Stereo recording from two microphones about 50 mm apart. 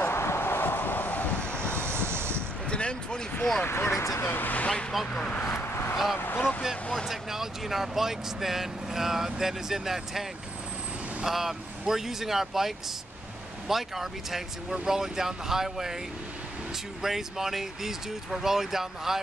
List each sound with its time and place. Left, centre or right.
0.0 s vehicle: left
1.8 s vehicle: right
2.6 s basketball bounce: left
3.6 s speech: left
3.9 s speech: left
4.2 s speech: left
4.9 s speech: centre
5.5 s vehicle: left
6.1 s speech: left
7.1 s speech: centre
11.2 s speech: centre
17.0 s speech: centre